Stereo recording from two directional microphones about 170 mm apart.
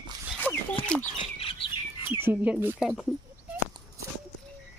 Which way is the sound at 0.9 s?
5° left (ahead or behind).